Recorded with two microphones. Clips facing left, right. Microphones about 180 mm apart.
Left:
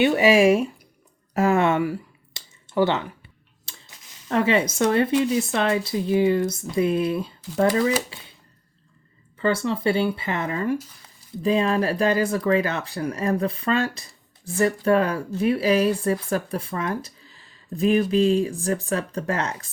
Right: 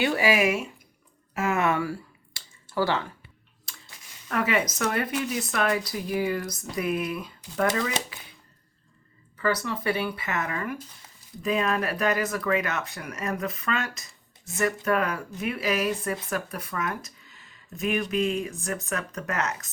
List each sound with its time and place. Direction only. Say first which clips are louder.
0.0 s speech: left 7 dB; 20° left (ahead or behind)
1.3 s a sound: left 6 dB; 35° left (ahead or behind)
3.7 s speech: left 1 dB; 25° left (ahead or behind)
9.4 s speech: left 5 dB; 25° left (ahead or behind)